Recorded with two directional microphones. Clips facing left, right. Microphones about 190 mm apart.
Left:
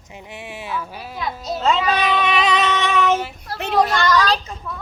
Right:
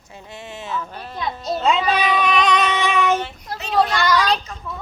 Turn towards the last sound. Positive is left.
turn(degrees=35)  # may be behind; listen again after turning